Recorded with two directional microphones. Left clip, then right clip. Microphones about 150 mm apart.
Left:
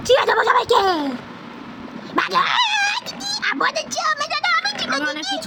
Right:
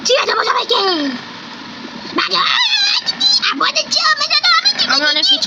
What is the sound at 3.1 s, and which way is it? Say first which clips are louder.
Speech: right 9 dB; 55° left (ahead or behind).